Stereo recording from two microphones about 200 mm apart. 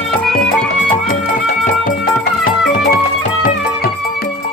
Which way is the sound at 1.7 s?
45° left (ahead or behind).